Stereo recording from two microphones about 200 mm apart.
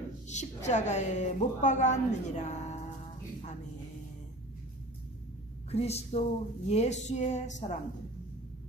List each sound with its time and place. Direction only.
0.3 s a woman's voice: 35° left (ahead or behind)
5.7 s a woman's voice: 30° left (ahead or behind)